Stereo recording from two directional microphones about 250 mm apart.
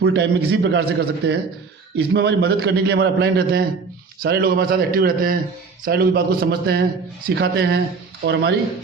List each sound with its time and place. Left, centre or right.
0.0 s a man's voice: right